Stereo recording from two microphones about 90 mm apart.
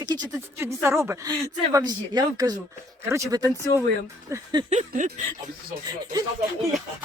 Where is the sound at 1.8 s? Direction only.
50° right (ahead or behind).